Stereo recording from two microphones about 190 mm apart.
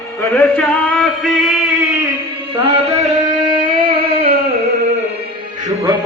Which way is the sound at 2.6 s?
30° right (ahead or behind).